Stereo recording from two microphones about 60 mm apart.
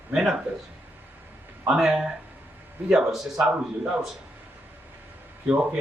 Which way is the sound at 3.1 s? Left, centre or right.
Centre.